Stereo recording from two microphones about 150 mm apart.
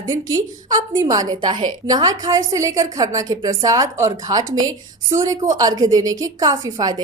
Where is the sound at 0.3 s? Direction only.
25° right (ahead or behind).